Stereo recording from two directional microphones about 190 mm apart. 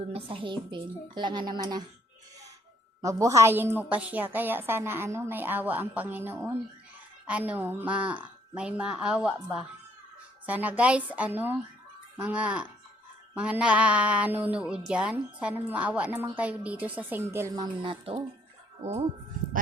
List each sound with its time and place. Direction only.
0.1 s a woman's voice: 25° right (ahead or behind)
3.0 s a woman's voice: 15° right (ahead or behind)
18.8 s speech: 35° right (ahead or behind)